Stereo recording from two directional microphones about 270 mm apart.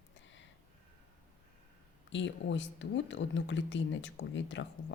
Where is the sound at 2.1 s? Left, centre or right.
Left.